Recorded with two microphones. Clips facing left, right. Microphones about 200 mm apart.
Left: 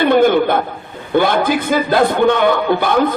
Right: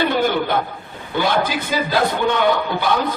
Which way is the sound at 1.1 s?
55° left (ahead or behind).